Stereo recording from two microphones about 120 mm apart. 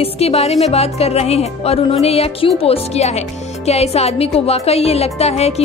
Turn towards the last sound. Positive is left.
turn(degrees=60)  # may be behind; listen again after turning